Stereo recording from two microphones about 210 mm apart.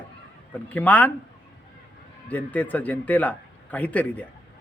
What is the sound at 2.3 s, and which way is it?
A man's voice, 5° left (ahead or behind).